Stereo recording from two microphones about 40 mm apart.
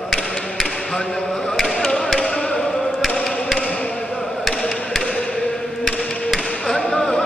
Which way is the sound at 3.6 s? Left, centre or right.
Left.